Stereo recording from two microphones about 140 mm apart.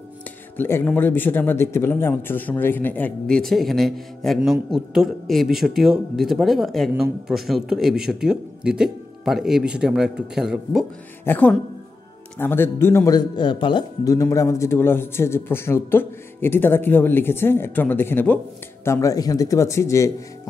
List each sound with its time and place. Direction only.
0.6 s a man's voice: 15° left (ahead or behind); by 10.9 s 5° right (ahead or behind)
11.2 s a man's voice: 10° left (ahead or behind); by 13.8 s 35° left (ahead or behind)
14.0 s a man's voice: 25° left (ahead or behind)